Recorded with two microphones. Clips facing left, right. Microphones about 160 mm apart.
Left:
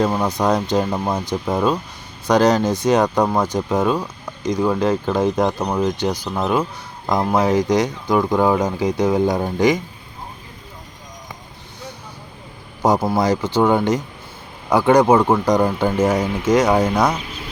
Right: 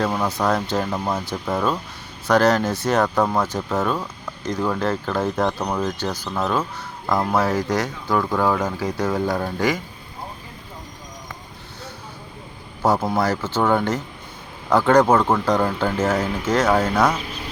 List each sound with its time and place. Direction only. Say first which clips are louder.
0.0 s speech: left 3 dB; 15° left (ahead or behind)
12.8 s speech: left 3 dB; 15° left (ahead or behind)